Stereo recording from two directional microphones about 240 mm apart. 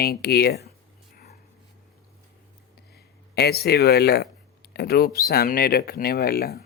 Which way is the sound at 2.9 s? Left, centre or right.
Left.